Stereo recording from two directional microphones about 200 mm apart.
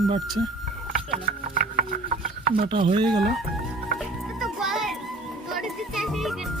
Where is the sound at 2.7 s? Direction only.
25° right (ahead or behind).